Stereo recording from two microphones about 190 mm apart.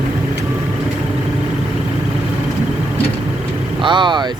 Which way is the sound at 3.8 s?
25° right (ahead or behind).